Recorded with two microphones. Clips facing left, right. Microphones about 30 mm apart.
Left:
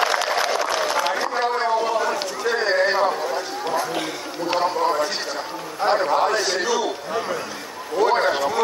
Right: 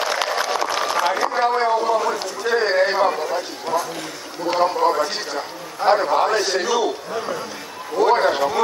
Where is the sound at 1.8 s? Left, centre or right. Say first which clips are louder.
Right 2 dB; centre.